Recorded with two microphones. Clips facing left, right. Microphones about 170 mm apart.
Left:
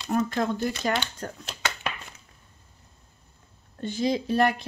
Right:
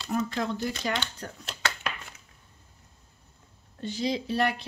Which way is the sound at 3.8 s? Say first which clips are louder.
Left 4 dB; 50° left (ahead or behind).